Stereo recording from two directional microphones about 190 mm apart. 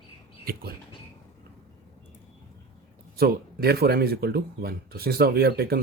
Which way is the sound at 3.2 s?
55° right (ahead or behind).